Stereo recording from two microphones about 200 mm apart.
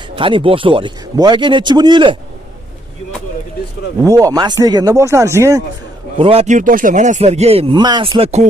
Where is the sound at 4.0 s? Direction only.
15° right (ahead or behind).